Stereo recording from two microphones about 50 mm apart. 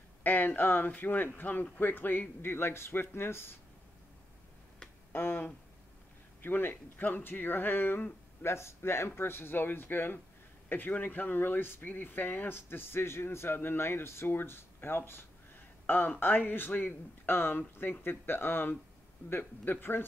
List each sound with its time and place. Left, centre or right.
0.2 s speech: left
5.1 s speech: left
8.5 s speech: left